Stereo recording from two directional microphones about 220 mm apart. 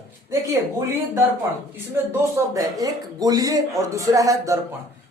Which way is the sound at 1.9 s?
10° right (ahead or behind).